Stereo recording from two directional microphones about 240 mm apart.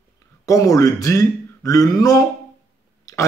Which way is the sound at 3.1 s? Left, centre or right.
Centre.